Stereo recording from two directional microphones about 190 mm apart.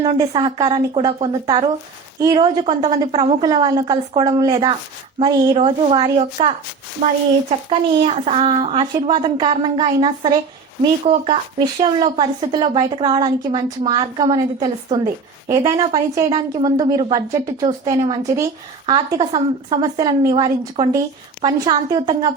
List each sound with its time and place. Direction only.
0.2 s speech: 20° right (ahead or behind)
7.0 s a child's voice: 45° right (ahead or behind)
7.7 s speech: 35° right (ahead or behind)